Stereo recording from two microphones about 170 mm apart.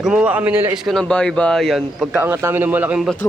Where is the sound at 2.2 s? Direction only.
15° right (ahead or behind).